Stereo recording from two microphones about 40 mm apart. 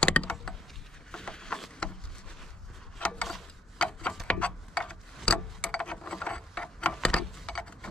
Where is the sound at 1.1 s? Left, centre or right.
Centre.